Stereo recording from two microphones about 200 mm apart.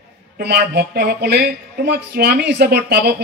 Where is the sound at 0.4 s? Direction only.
55° right (ahead or behind).